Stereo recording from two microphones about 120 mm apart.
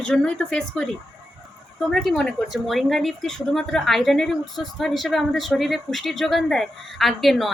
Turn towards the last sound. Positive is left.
turn(degrees=0)  # may be behind; listen again after turning